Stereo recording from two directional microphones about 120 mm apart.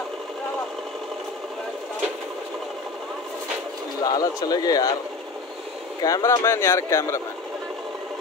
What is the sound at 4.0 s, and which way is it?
Speech, 30° left (ahead or behind).